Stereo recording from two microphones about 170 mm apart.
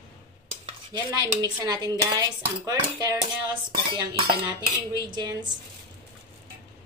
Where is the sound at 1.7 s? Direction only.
20° right (ahead or behind).